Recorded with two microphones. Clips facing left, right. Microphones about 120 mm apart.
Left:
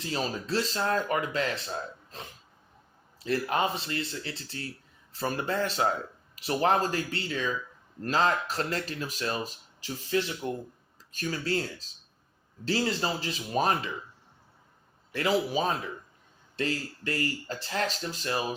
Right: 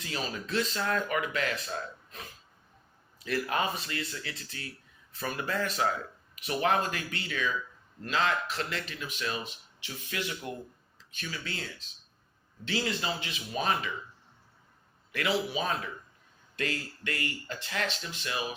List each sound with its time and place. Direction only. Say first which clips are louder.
0.0 s speech: left 4 dB; 30° left (ahead or behind)
11.1 s speech: left 9 dB; 40° left (ahead or behind)
15.1 s speech: left 4 dB; 35° left (ahead or behind)